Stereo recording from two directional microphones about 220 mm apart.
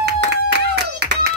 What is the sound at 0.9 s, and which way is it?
Clapping, 50° right (ahead or behind).